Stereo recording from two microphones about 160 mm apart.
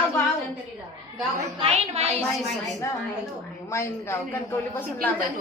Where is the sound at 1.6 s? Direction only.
40° right (ahead or behind).